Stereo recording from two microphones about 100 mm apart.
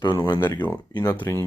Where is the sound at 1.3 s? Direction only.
30° left (ahead or behind).